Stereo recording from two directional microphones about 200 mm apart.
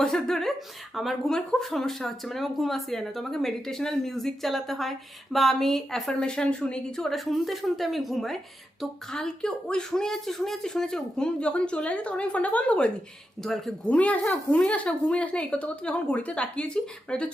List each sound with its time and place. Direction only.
0.0 s speech: 5° left (ahead or behind)